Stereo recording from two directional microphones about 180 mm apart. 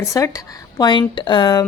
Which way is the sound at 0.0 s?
15° left (ahead or behind).